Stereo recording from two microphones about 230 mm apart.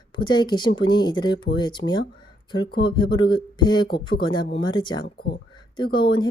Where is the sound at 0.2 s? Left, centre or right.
Centre.